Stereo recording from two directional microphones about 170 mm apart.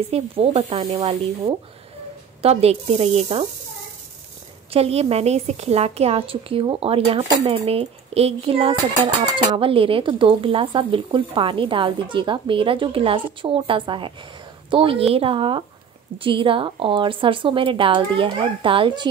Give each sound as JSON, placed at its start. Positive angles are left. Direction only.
{"t": 0.1, "sound": "a woman's voice", "side_deg": -40}
{"t": 2.4, "sound": "a woman's voice", "side_deg": -35}
{"t": 4.6, "sound": "a woman's voice", "side_deg": -35}